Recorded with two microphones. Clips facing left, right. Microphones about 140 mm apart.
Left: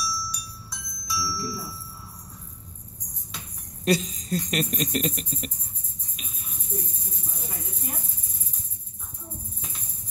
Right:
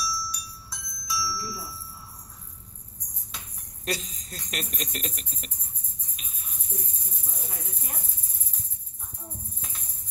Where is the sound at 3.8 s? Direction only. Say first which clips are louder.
Left 9 dB; centre (ahead or behind).